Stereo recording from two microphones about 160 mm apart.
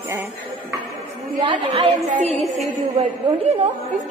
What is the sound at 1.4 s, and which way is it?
A woman's voice, 35° right (ahead or behind).